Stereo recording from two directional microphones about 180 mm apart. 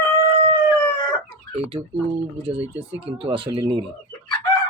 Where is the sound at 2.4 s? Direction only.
30° right (ahead or behind).